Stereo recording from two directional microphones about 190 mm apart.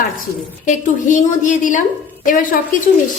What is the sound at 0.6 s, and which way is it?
A woman's voice, 40° left (ahead or behind).